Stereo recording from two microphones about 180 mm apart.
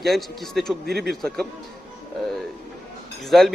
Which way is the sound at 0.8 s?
60° right (ahead or behind).